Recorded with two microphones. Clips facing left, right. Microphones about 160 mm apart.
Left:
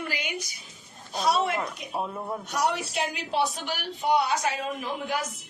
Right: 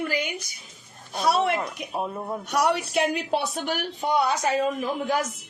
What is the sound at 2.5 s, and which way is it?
Speech, 70° right (ahead or behind).